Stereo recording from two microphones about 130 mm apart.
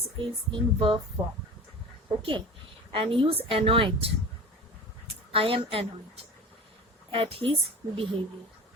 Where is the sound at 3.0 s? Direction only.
45° right (ahead or behind).